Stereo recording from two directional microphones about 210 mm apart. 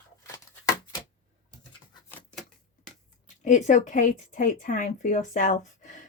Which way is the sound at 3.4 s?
35° left (ahead or behind).